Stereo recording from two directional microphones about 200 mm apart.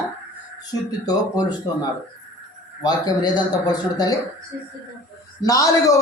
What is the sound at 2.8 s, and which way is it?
Speech, 20° left (ahead or behind).